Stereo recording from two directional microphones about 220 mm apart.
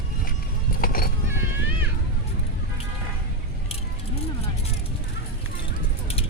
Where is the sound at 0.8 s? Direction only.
40° left (ahead or behind).